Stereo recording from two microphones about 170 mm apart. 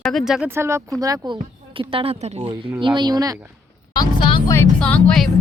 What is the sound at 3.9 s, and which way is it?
Speech, 25° left (ahead or behind).